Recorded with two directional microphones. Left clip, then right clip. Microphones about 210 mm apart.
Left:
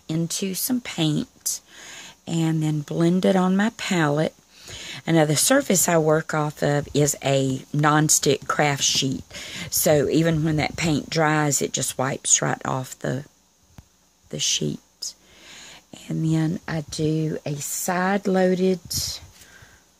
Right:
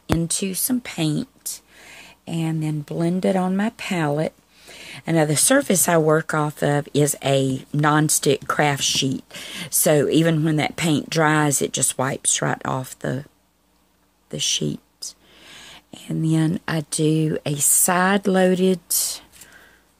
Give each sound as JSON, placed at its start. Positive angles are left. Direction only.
{"t": 0.0, "sound": "speech", "side_deg": 0}
{"t": 14.3, "sound": "speech", "side_deg": 0}